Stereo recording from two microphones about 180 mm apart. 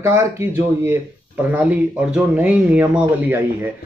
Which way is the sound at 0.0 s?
15° right (ahead or behind).